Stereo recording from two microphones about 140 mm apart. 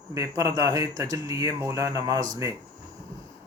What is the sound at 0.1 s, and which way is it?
Speech, 25° right (ahead or behind).